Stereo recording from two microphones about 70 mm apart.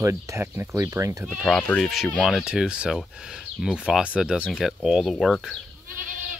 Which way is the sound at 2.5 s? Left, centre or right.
Centre.